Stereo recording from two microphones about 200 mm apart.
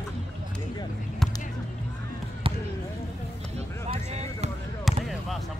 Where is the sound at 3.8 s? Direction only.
35° right (ahead or behind).